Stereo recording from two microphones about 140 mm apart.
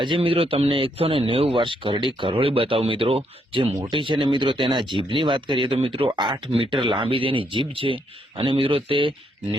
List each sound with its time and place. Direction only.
0.0 s speech: 40° right (ahead or behind)